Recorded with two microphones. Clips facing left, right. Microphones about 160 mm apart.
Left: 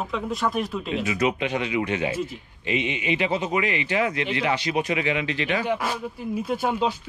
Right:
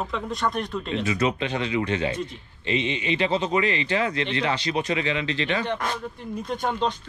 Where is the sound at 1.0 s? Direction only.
15° left (ahead or behind).